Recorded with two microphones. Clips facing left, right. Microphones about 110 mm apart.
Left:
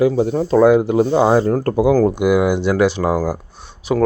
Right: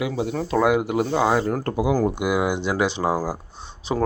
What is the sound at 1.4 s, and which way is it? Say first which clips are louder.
Speech: left 7 dB; 40° left (ahead or behind).